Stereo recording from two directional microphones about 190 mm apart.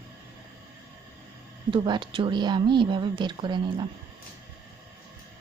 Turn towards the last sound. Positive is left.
turn(degrees=-25)  # may be behind; listen again after turning